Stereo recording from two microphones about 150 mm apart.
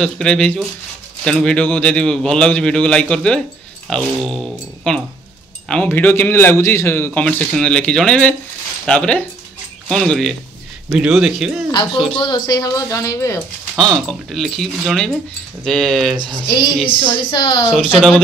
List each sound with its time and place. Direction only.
0.0 s a man's voice: 5° left (ahead or behind)
12.2 s speech: 30° left (ahead or behind)
13.7 s a man's voice: centre (ahead or behind)
16.4 s a woman's voice: 30° left (ahead or behind)
17.6 s a man's voice: 5° right (ahead or behind)